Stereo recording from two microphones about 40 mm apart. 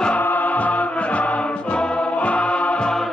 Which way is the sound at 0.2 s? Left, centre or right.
Left.